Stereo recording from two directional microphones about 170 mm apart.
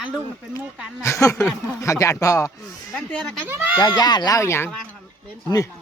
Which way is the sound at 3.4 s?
10° right (ahead or behind).